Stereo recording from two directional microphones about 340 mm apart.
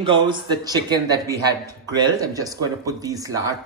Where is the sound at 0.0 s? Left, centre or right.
Centre.